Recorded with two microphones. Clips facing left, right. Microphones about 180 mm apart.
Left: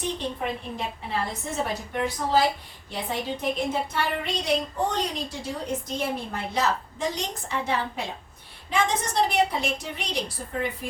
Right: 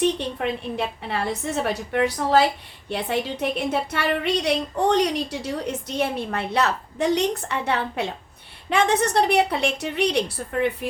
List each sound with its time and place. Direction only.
0.0 s a woman's voice: 75° right (ahead or behind)